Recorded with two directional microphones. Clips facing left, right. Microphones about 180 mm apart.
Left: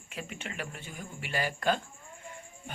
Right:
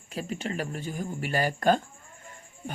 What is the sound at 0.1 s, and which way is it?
Speech, 35° right (ahead or behind).